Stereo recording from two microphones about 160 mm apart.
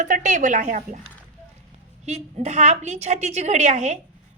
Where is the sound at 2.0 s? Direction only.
45° right (ahead or behind).